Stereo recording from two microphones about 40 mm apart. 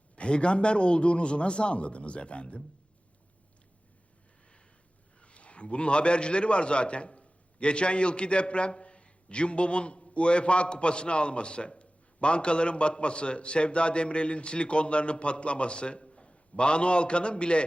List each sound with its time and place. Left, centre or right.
0.2 s a man's voice: left
5.2 s a man's voice: left